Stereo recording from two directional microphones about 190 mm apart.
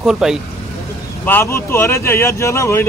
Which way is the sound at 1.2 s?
10° left (ahead or behind).